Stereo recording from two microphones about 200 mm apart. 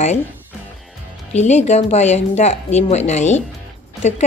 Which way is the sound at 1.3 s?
35° left (ahead or behind).